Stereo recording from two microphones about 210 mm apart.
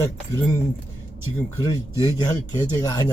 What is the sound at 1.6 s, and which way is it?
Speech, 20° left (ahead or behind).